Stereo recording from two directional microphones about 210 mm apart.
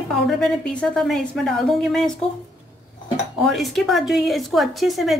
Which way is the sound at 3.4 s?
Centre (ahead or behind).